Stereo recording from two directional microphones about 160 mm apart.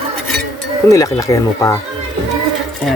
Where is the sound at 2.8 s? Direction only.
5° left (ahead or behind).